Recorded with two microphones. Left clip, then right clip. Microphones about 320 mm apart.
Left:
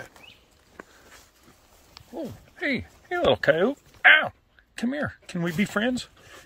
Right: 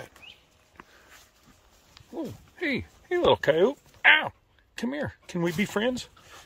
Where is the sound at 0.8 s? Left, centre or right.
Centre.